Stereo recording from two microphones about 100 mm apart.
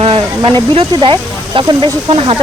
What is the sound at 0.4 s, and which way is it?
Speech, 55° right (ahead or behind).